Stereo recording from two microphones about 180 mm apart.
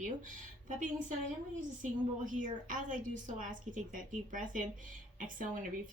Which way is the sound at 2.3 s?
45° right (ahead or behind).